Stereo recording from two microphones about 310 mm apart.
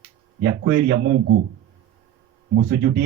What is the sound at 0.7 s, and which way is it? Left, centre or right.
Speech, right.